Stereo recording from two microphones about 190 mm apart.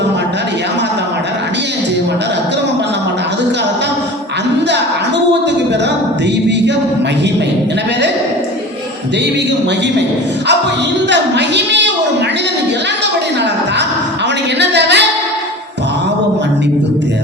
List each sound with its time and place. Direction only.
11.1 s a woman's voice: 65° right (ahead or behind)
14.6 s music: 65° right (ahead or behind)